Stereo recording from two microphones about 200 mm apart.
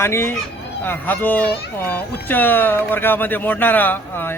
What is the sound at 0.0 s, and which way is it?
Speech, 15° left (ahead or behind).